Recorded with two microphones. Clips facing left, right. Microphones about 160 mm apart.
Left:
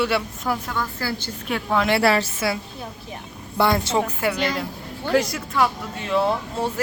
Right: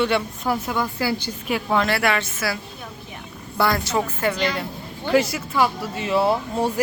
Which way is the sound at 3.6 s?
25° left (ahead or behind).